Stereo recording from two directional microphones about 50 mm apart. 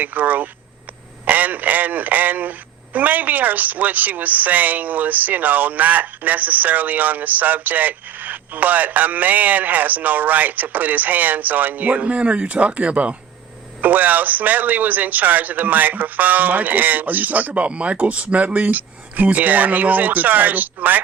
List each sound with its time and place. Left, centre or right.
0.0 s a man's voice: right